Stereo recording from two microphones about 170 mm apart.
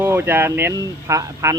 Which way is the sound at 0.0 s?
15° right (ahead or behind).